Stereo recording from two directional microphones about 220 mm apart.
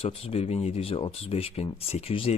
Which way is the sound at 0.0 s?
30° left (ahead or behind).